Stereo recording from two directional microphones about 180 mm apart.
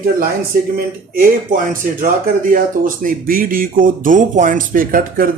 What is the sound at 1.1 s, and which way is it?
Speech, 45° right (ahead or behind).